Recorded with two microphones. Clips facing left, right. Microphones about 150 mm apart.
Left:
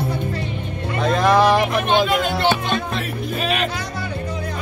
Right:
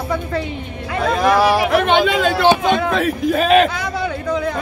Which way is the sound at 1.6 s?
90° right.